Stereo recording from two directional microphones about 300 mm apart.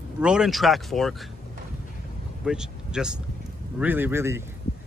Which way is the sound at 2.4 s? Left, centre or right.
Centre.